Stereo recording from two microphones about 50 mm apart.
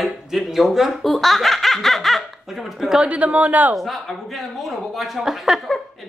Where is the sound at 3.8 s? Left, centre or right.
Centre.